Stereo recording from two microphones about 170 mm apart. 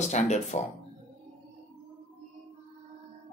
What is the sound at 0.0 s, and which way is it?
Speech, 45° left (ahead or behind).